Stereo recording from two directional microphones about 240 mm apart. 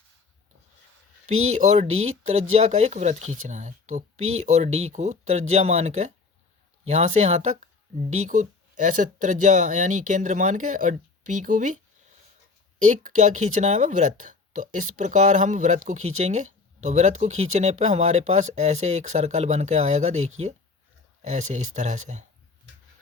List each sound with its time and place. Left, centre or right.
1.4 s speech: right
12.8 s speech: right